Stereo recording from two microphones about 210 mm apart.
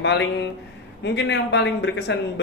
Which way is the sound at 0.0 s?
55° left (ahead or behind).